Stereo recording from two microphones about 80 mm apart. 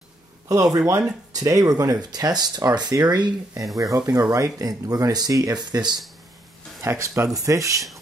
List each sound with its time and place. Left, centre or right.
0.5 s speech: right
3.7 s speech: right
6.8 s speech: right